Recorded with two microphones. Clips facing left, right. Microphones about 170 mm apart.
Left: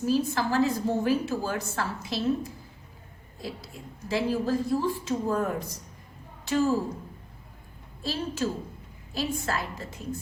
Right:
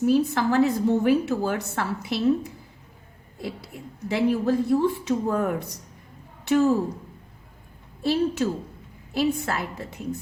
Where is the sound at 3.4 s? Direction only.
60° right (ahead or behind).